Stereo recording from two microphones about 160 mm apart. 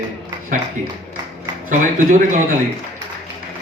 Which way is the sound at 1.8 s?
55° right (ahead or behind).